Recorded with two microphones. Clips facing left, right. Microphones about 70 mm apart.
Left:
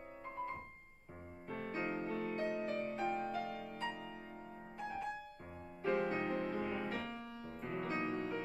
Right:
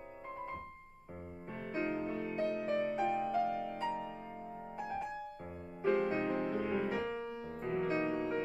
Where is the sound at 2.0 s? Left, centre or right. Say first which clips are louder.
Right 2 dB; centre.